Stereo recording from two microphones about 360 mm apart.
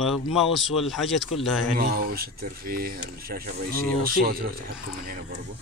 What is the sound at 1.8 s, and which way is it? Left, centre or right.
Speech, right.